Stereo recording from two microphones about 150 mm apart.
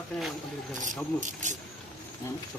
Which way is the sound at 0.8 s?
55° right (ahead or behind).